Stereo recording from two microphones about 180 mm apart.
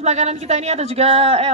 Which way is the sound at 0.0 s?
40° right (ahead or behind).